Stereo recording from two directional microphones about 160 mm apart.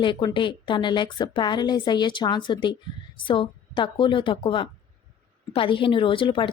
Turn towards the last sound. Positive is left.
turn(degrees=35)  # may be behind; listen again after turning